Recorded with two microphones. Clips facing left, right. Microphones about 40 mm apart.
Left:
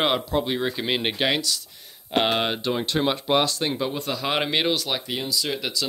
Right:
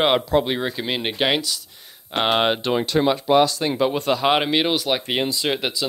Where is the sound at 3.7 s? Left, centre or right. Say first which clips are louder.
Right 6 dB; right.